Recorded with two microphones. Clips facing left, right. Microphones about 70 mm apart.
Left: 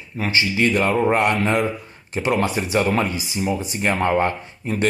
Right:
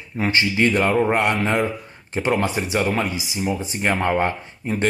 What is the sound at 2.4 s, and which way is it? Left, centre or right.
Speech, right.